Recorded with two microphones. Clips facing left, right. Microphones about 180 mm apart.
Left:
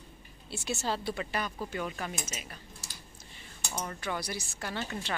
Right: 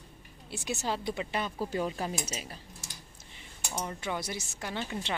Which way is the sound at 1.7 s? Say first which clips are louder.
Right 4 dB; 30° right (ahead or behind).